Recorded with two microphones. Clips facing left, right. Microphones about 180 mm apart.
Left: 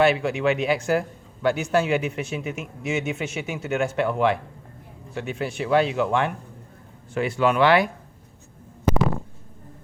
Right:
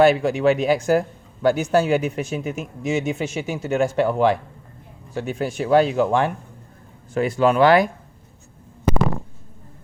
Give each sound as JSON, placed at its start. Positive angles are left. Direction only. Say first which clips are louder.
{"t": 0.0, "sound": "a man's voice", "louder": "right 4 dB", "side_deg": -40}